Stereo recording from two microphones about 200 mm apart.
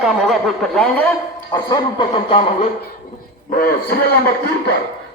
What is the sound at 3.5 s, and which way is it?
Speech, 45° left (ahead or behind).